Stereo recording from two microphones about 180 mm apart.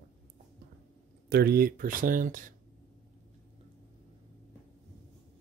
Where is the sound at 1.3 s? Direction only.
60° right (ahead or behind).